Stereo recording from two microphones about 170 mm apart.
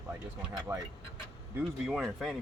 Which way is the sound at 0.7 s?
20° right (ahead or behind).